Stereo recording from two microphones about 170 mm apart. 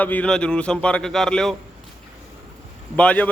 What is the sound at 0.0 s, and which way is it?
Speech, 10° left (ahead or behind).